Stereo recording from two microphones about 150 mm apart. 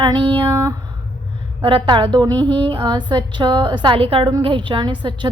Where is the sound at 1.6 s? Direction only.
35° right (ahead or behind).